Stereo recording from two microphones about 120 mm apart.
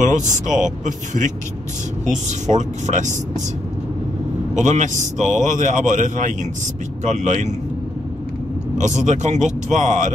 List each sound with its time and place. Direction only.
0.0 s a man's voice: 90° right
4.6 s a man's voice: 90° right
9.0 s a man's voice: 80° right